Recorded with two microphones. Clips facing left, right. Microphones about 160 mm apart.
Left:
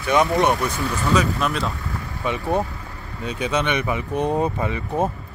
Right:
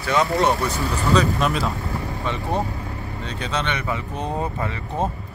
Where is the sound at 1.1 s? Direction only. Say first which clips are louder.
Right 2 dB; centre (ahead or behind).